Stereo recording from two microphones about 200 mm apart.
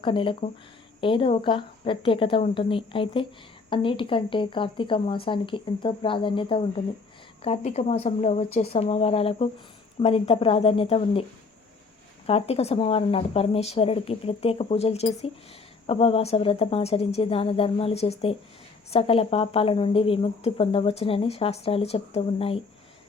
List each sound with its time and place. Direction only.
0.0 s a woman's voice: 25° left (ahead or behind)